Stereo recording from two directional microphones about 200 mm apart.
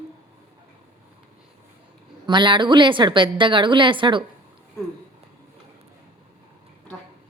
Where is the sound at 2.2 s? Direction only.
25° right (ahead or behind).